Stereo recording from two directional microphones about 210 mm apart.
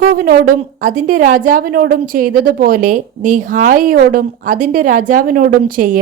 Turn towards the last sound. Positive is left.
turn(degrees=-40)  # may be behind; listen again after turning